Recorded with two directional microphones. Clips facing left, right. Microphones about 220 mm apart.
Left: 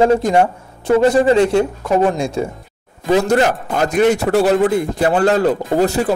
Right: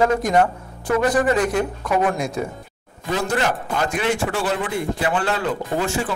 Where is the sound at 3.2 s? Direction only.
40° left (ahead or behind).